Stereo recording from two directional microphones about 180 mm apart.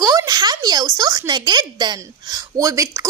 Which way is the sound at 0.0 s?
20° right (ahead or behind).